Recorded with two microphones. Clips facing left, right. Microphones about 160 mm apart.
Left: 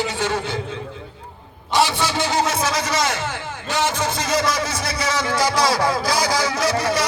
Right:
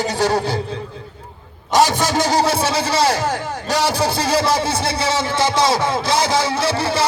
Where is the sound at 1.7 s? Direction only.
40° right (ahead or behind).